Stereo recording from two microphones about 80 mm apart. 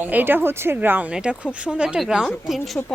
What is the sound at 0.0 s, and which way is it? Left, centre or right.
Speech, right.